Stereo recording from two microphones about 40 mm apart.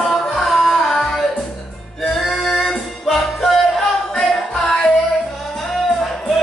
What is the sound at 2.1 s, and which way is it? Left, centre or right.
Music, centre.